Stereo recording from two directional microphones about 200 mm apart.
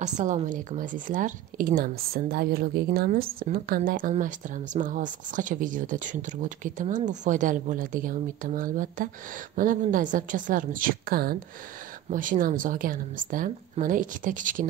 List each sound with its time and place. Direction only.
0.0 s speech: 35° right (ahead or behind)